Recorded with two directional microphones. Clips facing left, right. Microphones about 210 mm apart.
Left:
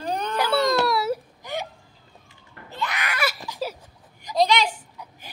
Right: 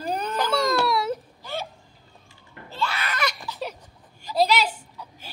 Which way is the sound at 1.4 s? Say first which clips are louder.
Left 1 dB; 15° left (ahead or behind).